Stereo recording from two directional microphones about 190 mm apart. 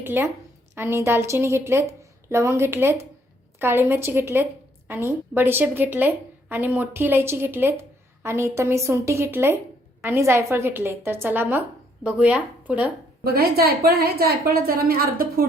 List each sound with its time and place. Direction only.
0.0 s a woman's voice: 10° right (ahead or behind)
13.2 s a woman's voice: 55° right (ahead or behind)